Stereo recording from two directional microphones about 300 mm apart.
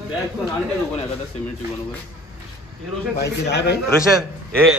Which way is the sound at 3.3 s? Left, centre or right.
Left.